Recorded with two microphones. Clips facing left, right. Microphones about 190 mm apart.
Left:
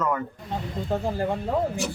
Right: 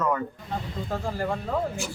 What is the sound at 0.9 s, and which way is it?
Speech, 20° left (ahead or behind).